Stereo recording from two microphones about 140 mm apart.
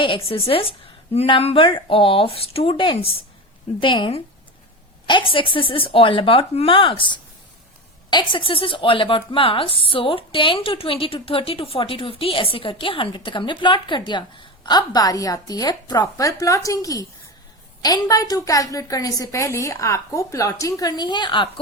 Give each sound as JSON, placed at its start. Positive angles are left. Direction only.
{"t": 0.0, "sound": "a woman's voice", "side_deg": 40}